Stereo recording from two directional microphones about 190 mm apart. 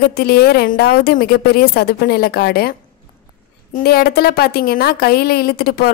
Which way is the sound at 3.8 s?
55° left (ahead or behind).